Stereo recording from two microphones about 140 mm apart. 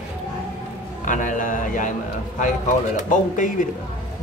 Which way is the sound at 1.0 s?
65° left (ahead or behind).